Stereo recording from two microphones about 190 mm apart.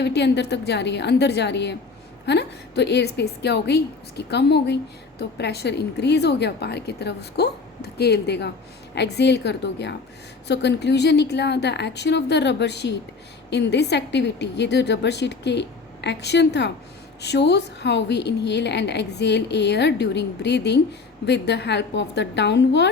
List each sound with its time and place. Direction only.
0.0 s a woman's voice: 60° left (ahead or behind)